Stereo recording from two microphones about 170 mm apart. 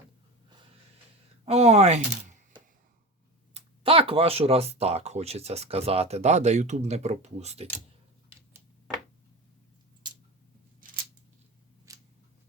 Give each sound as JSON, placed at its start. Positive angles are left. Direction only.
{"t": 1.5, "sound": "speech", "side_deg": -40}
{"t": 3.5, "sound": "speech", "side_deg": -35}
{"t": 11.9, "sound": "scissors", "side_deg": -20}